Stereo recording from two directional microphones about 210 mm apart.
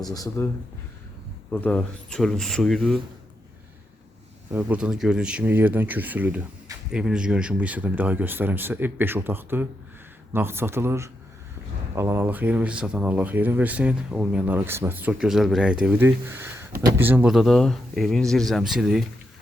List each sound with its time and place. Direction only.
0.0 s speech: 15° left (ahead or behind)
1.5 s speech: 5° left (ahead or behind)
4.5 s speech: 5° right (ahead or behind)